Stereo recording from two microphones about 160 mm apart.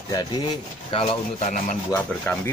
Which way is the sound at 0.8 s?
40° left (ahead or behind).